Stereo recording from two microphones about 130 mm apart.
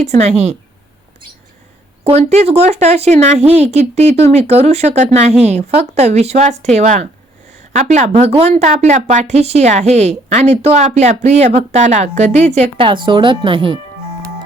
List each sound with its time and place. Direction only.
0.0 s speech: 60° right (ahead or behind)
2.0 s speech: 55° right (ahead or behind)
8.1 s speech: 50° right (ahead or behind)
12.7 s speech: 40° right (ahead or behind)